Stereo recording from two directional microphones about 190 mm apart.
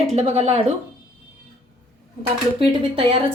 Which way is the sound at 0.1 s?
35° right (ahead or behind).